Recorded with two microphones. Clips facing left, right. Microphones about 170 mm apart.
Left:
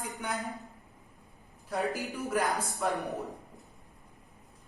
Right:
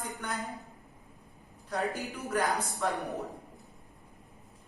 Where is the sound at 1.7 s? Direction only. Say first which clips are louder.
Left 1 dB; centre (ahead or behind).